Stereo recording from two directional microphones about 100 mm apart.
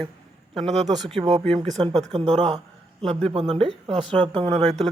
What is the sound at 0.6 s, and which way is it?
Speech, 90° right.